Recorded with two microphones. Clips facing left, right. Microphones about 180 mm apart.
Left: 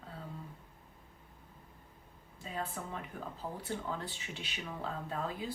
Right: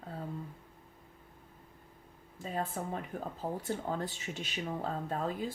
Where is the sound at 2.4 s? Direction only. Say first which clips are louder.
Right 4 dB; 45° right (ahead or behind).